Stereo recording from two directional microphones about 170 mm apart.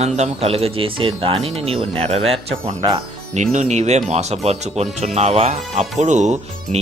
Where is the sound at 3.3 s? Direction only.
45° right (ahead or behind).